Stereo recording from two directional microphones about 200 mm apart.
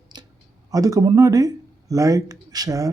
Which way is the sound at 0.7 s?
15° right (ahead or behind).